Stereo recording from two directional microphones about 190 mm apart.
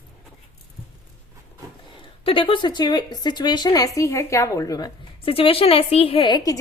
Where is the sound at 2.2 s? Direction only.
25° left (ahead or behind).